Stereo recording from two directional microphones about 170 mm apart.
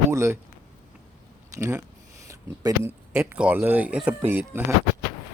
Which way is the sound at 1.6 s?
15° right (ahead or behind).